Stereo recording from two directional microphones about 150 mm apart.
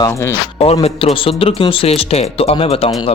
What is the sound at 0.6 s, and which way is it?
Speech, 40° left (ahead or behind).